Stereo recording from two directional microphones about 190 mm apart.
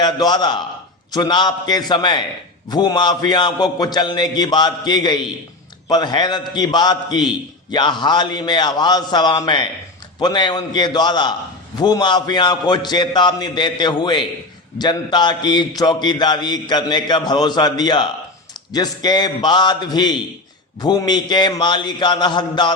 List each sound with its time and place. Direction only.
0.0 s a man's voice: 20° left (ahead or behind)